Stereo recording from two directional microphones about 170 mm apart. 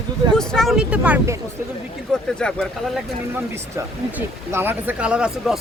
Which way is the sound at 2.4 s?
5° left (ahead or behind).